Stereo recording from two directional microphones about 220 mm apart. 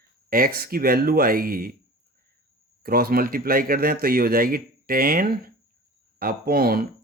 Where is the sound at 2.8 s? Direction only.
40° right (ahead or behind).